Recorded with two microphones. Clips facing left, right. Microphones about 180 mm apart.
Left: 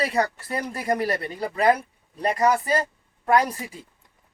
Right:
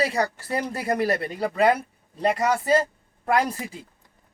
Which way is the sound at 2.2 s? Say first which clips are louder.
Left 1 dB; 25° right (ahead or behind).